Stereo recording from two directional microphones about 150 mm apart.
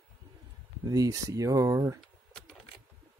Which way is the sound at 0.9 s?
25° right (ahead or behind).